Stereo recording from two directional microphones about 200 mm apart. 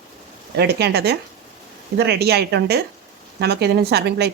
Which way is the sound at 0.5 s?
55° right (ahead or behind).